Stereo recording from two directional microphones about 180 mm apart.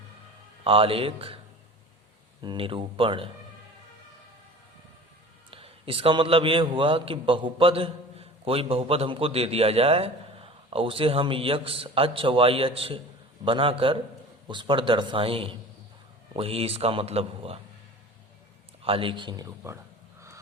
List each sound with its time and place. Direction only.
0.6 s a man's voice: 30° right (ahead or behind)
2.4 s a man's voice: 25° right (ahead or behind)
5.5 s a man's voice: 30° right (ahead or behind)
18.8 s a man's voice: 30° right (ahead or behind)